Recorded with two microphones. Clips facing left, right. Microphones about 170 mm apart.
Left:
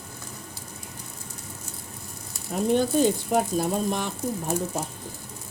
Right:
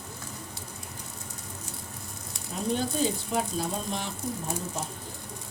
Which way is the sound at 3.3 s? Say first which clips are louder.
Left 6 dB; 50° left (ahead or behind).